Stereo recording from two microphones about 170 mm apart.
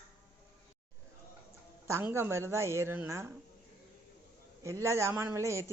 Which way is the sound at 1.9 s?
15° right (ahead or behind).